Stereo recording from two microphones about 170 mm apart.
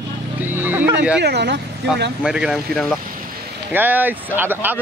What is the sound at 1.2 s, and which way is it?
Speech, 85° right.